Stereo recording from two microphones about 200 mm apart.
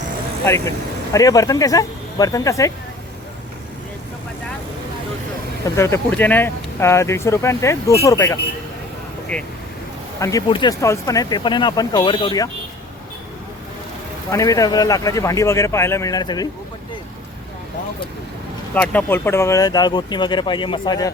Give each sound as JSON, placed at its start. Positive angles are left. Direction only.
{"t": 0.4, "sound": "speech", "side_deg": 15}
{"t": 5.7, "sound": "speech", "side_deg": 15}
{"t": 9.3, "sound": "speech", "side_deg": 5}
{"t": 10.2, "sound": "speech", "side_deg": 15}
{"t": 14.3, "sound": "speech", "side_deg": 15}
{"t": 18.7, "sound": "speech", "side_deg": 10}